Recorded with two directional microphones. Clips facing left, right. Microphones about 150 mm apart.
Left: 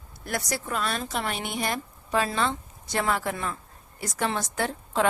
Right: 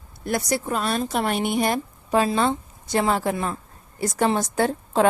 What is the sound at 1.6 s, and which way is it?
A woman's voice, 30° right (ahead or behind).